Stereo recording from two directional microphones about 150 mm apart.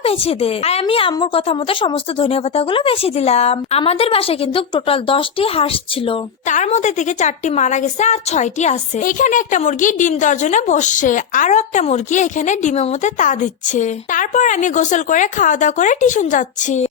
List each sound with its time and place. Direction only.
0.0 s a woman's voice: 40° left (ahead or behind)
6.5 s a woman's voice: 50° left (ahead or behind)